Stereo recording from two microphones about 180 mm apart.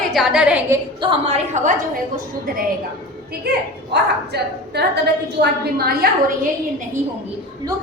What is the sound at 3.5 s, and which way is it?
A woman's voice, 60° right (ahead or behind).